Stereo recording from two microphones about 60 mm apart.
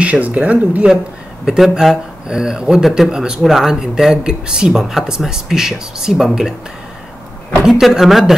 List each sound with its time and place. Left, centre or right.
0.0 s speech: right
1.4 s speech: centre
7.8 s speech: centre